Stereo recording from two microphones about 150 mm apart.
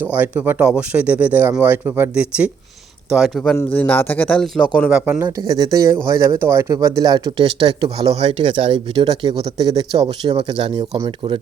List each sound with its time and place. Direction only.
0.0 s speech: 10° right (ahead or behind)
5.4 s speech: 25° right (ahead or behind)